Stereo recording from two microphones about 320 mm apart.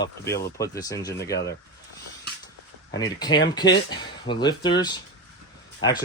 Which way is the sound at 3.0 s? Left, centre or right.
Centre.